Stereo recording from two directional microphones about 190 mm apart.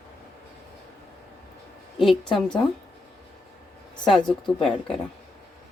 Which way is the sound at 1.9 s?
Centre (ahead or behind).